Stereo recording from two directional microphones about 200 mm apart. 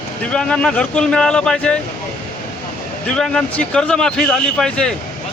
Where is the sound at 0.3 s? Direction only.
5° left (ahead or behind).